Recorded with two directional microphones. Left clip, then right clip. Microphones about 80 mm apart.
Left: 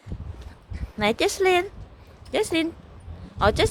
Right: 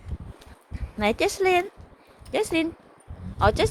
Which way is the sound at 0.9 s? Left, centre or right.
Left.